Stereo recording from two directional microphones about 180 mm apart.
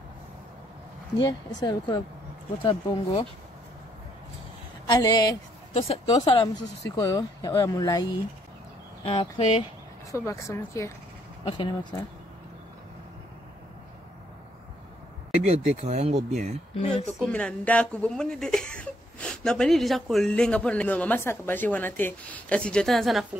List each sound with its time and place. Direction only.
1.1 s speech: 20° left (ahead or behind)
4.8 s speech: 20° left (ahead or behind)
5.8 s speech: 30° left (ahead or behind)
10.1 s speech: 15° left (ahead or behind)
15.3 s speech: 40° right (ahead or behind)
17.3 s speech: 5° left (ahead or behind)